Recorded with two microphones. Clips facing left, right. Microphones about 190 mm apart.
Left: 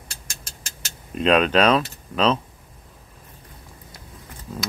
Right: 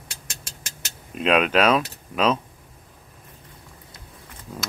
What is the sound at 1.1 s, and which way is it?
Speech, 5° right (ahead or behind).